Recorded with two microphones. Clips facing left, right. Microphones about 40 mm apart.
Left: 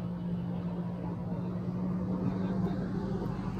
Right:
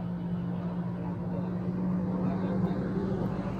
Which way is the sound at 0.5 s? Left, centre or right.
Right.